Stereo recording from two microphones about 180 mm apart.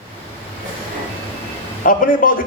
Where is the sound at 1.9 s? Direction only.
50° left (ahead or behind).